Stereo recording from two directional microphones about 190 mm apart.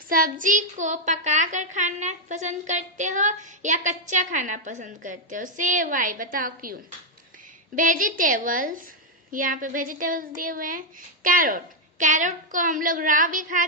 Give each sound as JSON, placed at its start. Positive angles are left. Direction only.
{"t": 0.1, "sound": "a child's voice", "side_deg": -45}